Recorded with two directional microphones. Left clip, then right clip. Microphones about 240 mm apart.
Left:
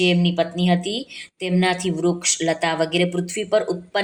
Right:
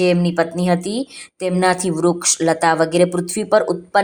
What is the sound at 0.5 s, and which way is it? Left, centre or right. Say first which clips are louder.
A woman's voice: right 3 dB; right.